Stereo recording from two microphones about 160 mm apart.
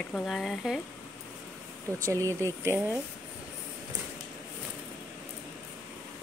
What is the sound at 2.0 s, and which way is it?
Speech, 20° right (ahead or behind).